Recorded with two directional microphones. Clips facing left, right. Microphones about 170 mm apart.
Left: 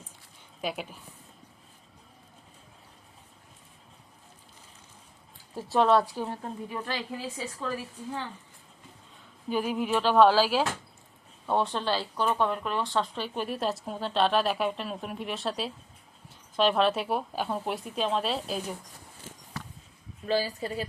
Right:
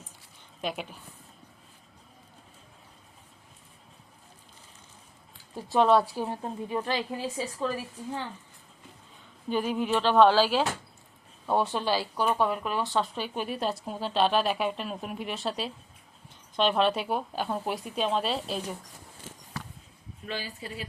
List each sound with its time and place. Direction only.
0.6 s speech: 5° left (ahead or behind)
5.5 s speech: centre (ahead or behind)
6.2 s speech: 20° right (ahead or behind)
9.5 s speech: 5° left (ahead or behind)
20.2 s a woman's voice: 35° left (ahead or behind)